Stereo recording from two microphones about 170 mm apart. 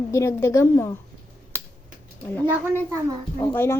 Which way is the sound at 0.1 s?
15° left (ahead or behind).